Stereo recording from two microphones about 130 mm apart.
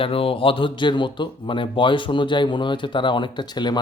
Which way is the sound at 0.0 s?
45° left (ahead or behind).